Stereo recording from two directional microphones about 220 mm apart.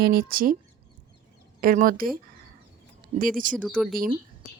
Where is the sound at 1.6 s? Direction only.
40° right (ahead or behind).